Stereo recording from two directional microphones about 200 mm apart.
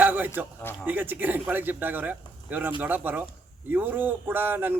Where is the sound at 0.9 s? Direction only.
10° right (ahead or behind).